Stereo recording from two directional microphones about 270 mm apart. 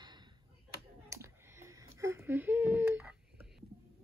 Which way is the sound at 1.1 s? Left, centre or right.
Centre.